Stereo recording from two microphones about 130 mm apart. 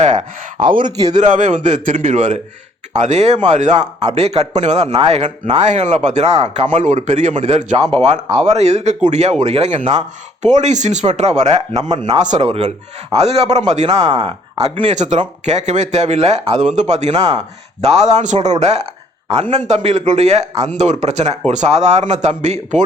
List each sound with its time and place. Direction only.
0.0 s a sound: 60° right (ahead or behind)
1.0 s a man's voice: 65° right (ahead or behind)
4.1 s a man's voice: 55° right (ahead or behind)
4.9 s speech: 45° right (ahead or behind)
5.2 s a man's voice: 60° right (ahead or behind)
7.9 s a man's voice: 50° right (ahead or behind)
11.7 s speech: 30° right (ahead or behind)
12.2 s a man's voice: 60° right (ahead or behind)
14.1 s speech: 35° right (ahead or behind)
14.6 s a man's voice: 55° right (ahead or behind)